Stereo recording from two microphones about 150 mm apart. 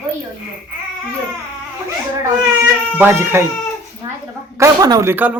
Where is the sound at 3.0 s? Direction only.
15° right (ahead or behind).